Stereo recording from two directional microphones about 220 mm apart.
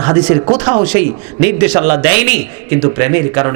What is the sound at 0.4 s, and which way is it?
A man's voice, 25° right (ahead or behind).